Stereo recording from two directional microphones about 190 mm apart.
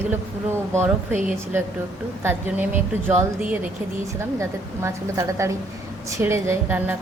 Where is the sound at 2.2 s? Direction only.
10° right (ahead or behind).